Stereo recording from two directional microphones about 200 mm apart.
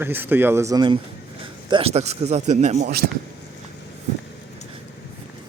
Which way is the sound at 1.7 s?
30° right (ahead or behind).